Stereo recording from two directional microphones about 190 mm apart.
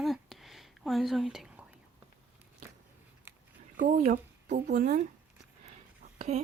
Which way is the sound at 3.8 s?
45° right (ahead or behind).